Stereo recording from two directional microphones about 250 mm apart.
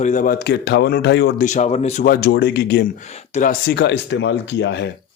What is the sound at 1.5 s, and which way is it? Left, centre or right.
Speech, left.